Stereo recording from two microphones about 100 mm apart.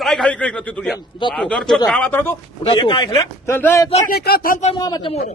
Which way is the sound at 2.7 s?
55° left (ahead or behind).